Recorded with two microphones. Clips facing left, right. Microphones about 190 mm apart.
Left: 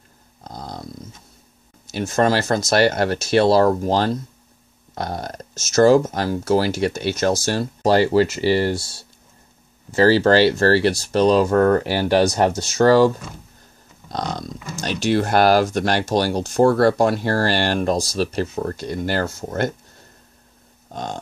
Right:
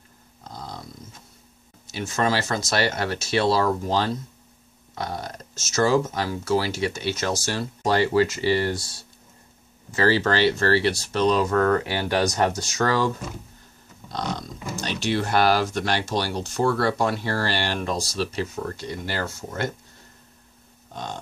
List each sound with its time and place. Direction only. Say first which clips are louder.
0.4 s a sound: left 4 dB; 40° left (ahead or behind)
2.0 s speech: left 6 dB; 45° left (ahead or behind)
7.4 s speech: left 6 dB; 35° left (ahead or behind)
14.8 s speech: left 6 dB; 45° left (ahead or behind)
20.9 s livestock: left 5 dB; 45° left (ahead or behind)